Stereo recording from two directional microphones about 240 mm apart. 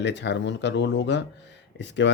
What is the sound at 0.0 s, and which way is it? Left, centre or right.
Speech, left.